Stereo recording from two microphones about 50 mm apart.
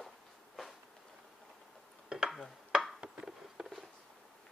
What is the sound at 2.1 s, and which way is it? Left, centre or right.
Dishes, centre.